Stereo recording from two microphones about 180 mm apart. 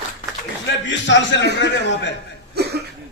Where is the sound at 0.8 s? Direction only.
90° left.